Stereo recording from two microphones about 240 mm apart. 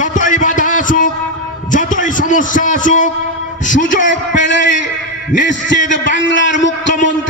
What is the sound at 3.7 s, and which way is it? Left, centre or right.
Speech, left.